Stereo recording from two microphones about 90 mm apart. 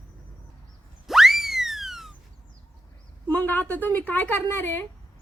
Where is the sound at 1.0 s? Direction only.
5° right (ahead or behind).